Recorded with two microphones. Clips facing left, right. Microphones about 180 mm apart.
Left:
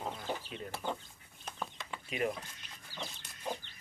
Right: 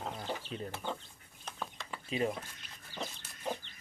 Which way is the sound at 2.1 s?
30° right (ahead or behind).